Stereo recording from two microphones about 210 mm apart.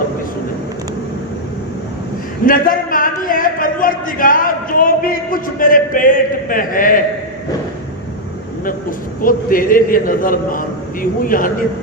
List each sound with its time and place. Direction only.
2.5 s speech: 40° left (ahead or behind)
9.2 s a man's voice: 40° left (ahead or behind)